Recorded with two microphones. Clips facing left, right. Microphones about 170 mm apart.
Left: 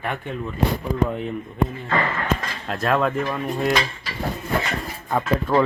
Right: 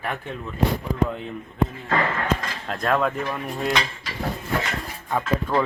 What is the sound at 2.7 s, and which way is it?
Speech, 5° left (ahead or behind).